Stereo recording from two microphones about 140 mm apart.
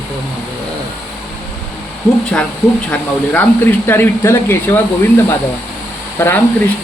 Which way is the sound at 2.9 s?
10° left (ahead or behind).